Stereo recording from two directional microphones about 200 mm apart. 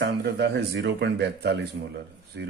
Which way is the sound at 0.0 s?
55° right (ahead or behind).